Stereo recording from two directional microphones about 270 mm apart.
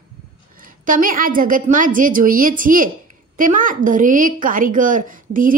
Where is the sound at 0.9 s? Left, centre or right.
Right.